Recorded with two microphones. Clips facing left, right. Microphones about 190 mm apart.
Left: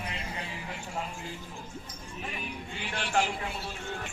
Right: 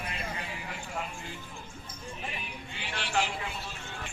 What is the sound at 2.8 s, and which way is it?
Speech, 45° left (ahead or behind).